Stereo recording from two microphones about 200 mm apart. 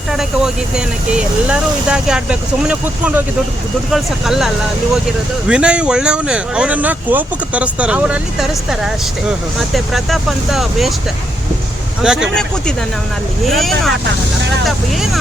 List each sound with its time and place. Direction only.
0.1 s vehicle: centre (ahead or behind)
1.1 s speech: 5° right (ahead or behind)
12.0 s speech: 5° right (ahead or behind)